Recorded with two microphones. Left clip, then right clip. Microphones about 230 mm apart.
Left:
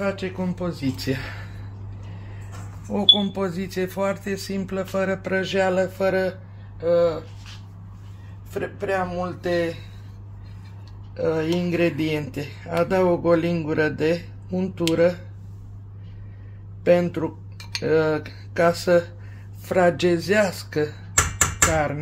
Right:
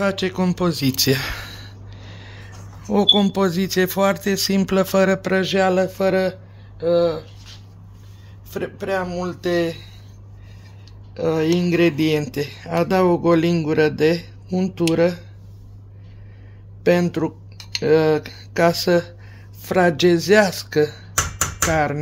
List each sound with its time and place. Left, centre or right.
0.0 s speech: right
2.1 s a sound: right
2.9 s speech: right
8.5 s speech: right
11.1 s speech: right
16.8 s speech: right